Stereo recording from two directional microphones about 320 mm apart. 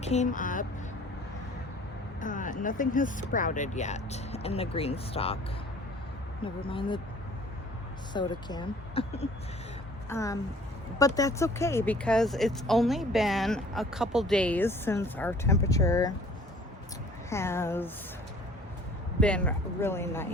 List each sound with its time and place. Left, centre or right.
0.0 s speech: left
2.2 s speech: left
6.4 s speech: centre
8.1 s speech: centre
17.2 s speech: centre
19.2 s speech: centre